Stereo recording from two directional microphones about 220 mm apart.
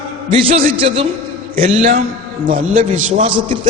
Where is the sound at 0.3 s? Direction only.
25° right (ahead or behind).